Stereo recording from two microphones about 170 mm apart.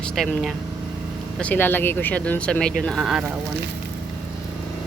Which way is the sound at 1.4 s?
10° left (ahead or behind).